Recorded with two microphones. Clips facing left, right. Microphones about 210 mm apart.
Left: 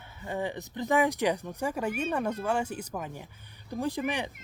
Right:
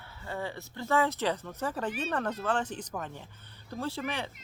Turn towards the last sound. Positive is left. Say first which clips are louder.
# left 4 dB
turn(degrees=15)  # may be behind; listen again after turning